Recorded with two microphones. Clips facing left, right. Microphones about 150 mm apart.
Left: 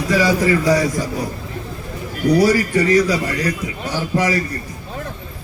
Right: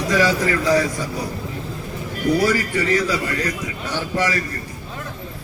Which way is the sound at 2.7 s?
15° left (ahead or behind).